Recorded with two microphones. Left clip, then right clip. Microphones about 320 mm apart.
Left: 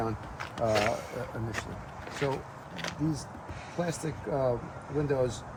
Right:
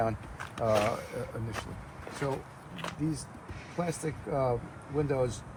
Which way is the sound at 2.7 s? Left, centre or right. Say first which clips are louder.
Left 2 dB; centre.